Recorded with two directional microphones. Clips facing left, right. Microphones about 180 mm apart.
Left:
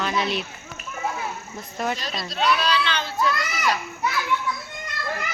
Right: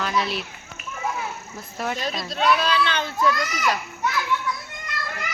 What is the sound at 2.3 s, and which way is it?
A child's voice, 50° right (ahead or behind).